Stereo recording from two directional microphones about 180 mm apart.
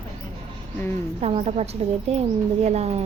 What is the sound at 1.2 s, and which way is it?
Speech, 35° right (ahead or behind).